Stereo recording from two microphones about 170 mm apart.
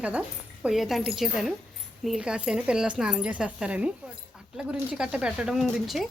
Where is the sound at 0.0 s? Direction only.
5° right (ahead or behind).